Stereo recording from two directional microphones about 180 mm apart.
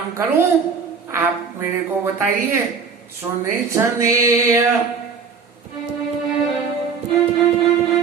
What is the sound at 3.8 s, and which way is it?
Music, 15° right (ahead or behind).